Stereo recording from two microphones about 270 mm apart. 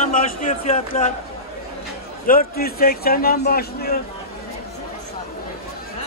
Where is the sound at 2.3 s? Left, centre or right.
Left.